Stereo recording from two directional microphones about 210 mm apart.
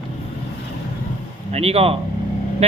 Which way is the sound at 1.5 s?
30° right (ahead or behind).